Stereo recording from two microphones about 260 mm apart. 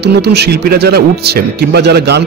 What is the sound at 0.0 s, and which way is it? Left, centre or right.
Speech, right.